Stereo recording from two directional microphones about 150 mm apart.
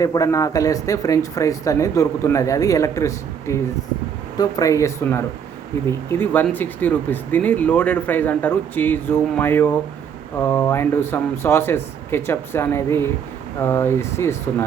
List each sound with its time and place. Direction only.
0.0 s speech: 25° left (ahead or behind)